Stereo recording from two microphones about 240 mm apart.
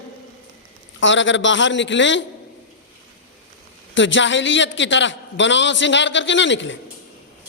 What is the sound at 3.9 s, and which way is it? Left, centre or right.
A man's voice, left.